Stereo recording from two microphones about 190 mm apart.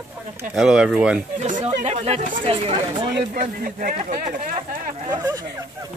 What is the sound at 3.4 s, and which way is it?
Speech, 45° right (ahead or behind).